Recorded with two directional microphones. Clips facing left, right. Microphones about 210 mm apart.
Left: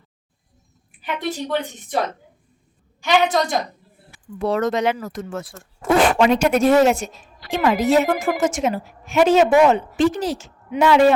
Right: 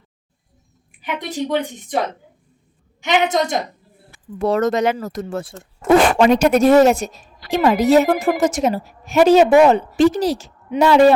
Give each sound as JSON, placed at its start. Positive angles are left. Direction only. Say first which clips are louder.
{"t": 1.0, "sound": "speech", "louder": "right 2 dB", "side_deg": -15}
{"t": 3.0, "sound": "speech", "louder": "even", "side_deg": -20}
{"t": 4.4, "sound": "speech", "louder": "right 3 dB", "side_deg": -45}
{"t": 6.1, "sound": "a woman's voice", "louder": "right 3 dB", "side_deg": -40}